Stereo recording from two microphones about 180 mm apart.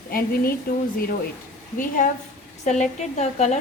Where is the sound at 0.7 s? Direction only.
55° left (ahead or behind).